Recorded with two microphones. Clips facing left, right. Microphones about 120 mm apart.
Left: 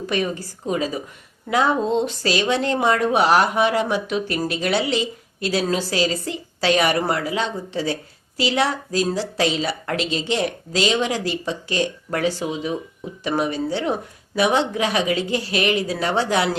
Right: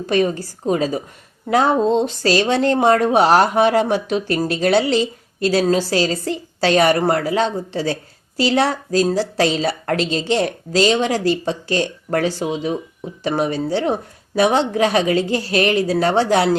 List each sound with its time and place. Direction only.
0.1 s speech: 35° right (ahead or behind)